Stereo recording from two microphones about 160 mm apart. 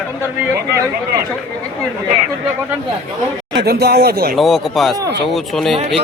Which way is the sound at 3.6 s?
80° right.